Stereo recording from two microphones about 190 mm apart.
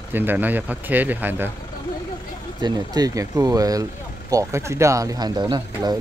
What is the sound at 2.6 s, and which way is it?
Speech, 20° right (ahead or behind).